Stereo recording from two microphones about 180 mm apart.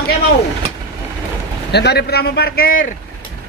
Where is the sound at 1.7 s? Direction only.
65° left (ahead or behind); by 3.0 s 50° left (ahead or behind).